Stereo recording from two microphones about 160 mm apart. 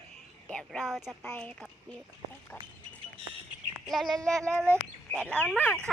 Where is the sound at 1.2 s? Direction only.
10° left (ahead or behind).